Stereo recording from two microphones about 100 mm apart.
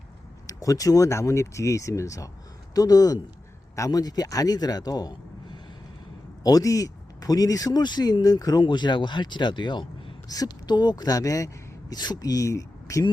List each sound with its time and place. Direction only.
0.4 s speech: 35° left (ahead or behind)
10.2 s speech: 40° left (ahead or behind)